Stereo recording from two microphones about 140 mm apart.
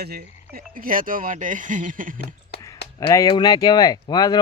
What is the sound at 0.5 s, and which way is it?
Speech, 85° right.